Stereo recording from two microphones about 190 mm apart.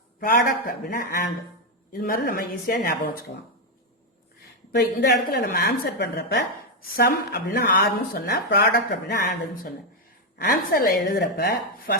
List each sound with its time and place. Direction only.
0.3 s speech: 45° left (ahead or behind)
4.7 s speech: 60° left (ahead or behind)
6.9 s speech: 55° left (ahead or behind)